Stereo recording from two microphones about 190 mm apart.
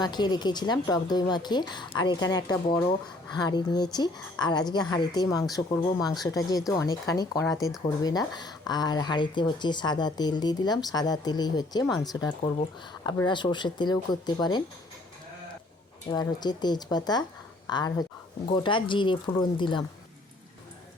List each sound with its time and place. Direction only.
0.0 s speech: 20° left (ahead or behind)
16.0 s speech: 20° left (ahead or behind)